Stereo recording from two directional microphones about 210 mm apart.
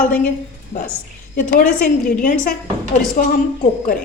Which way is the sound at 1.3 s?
40° left (ahead or behind).